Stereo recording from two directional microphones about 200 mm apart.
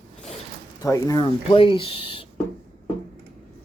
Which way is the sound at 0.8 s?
15° left (ahead or behind).